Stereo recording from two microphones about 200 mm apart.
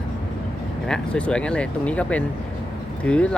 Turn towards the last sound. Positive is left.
turn(degrees=5)  # may be behind; listen again after turning